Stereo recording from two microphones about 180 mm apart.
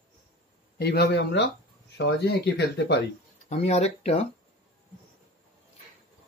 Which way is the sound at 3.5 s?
35° left (ahead or behind).